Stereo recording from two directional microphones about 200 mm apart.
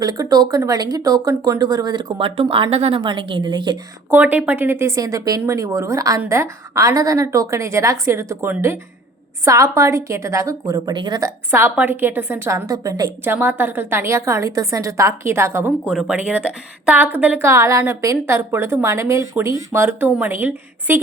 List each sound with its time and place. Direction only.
0.0 s speech: 20° right (ahead or behind)
4.1 s a woman's voice: 10° right (ahead or behind)